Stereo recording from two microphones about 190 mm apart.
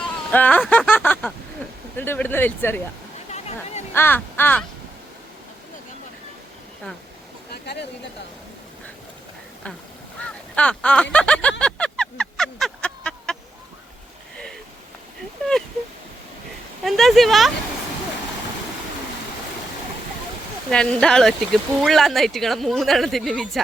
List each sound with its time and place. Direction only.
0.3 s speech: 10° left (ahead or behind)
3.3 s speech: 35° left (ahead or behind)
3.9 s speech: 10° left (ahead or behind)
7.5 s a sound: 60° left (ahead or behind)
10.2 s speech: 5° left (ahead or behind)
11.6 s a sound: 5° left (ahead or behind)
16.8 s speech: centre (ahead or behind)
20.7 s speech: 5° left (ahead or behind)